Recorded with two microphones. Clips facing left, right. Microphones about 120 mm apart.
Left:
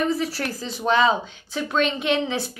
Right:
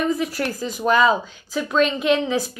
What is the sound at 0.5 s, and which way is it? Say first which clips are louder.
Speech: right 4 dB; 45° right (ahead or behind).